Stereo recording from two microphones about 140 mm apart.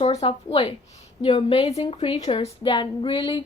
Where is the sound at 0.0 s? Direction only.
45° left (ahead or behind).